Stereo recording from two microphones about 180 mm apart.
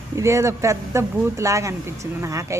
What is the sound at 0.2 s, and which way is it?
Speech, 15° right (ahead or behind).